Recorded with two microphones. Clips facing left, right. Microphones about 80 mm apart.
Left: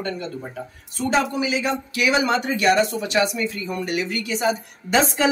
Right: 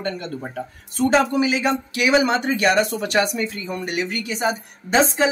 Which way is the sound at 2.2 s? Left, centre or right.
Right.